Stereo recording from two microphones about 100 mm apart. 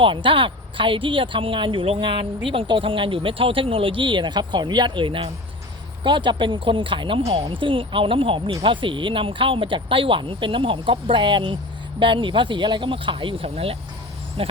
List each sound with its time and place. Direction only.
0.0 s speech: 55° right (ahead or behind); by 7.4 s 80° right
7.4 s speech: 55° right (ahead or behind)